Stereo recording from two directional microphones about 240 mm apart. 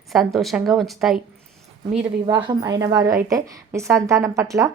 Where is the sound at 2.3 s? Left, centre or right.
Centre.